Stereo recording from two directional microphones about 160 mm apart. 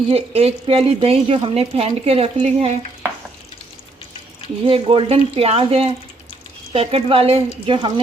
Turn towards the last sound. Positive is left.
turn(degrees=-35)  # may be behind; listen again after turning